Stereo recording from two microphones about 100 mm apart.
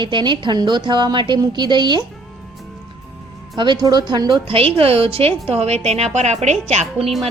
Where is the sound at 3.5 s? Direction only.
50° right (ahead or behind).